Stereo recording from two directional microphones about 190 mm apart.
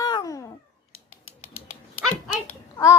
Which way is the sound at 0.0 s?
20° left (ahead or behind).